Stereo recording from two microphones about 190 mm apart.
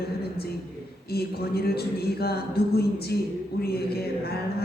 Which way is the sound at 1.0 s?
55° left (ahead or behind).